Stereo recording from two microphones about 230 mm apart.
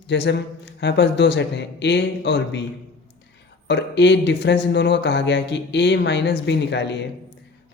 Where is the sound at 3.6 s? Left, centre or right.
Left.